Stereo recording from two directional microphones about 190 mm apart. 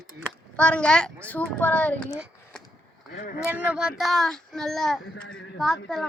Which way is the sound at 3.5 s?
5° right (ahead or behind).